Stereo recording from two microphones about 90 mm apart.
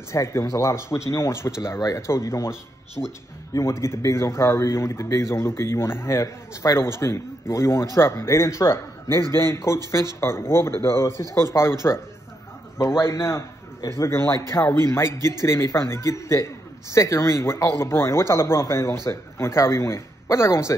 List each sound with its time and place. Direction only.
0.1 s speech: 35° left (ahead or behind)
13.0 s a man's voice: 30° left (ahead or behind)